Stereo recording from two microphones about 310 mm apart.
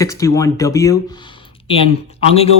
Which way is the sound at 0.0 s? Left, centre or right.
Centre.